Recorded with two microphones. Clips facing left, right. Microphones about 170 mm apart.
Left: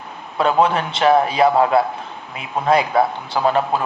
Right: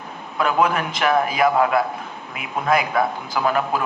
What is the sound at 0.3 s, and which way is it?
A man's voice, 30° left (ahead or behind).